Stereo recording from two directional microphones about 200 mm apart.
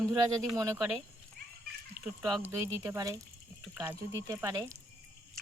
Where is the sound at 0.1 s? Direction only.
15° right (ahead or behind).